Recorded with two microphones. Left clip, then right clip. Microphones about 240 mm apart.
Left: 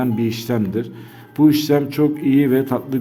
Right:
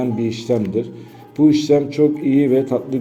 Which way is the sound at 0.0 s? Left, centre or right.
Left.